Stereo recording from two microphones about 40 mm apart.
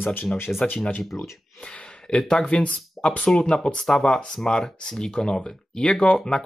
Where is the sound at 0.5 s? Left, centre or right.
Left.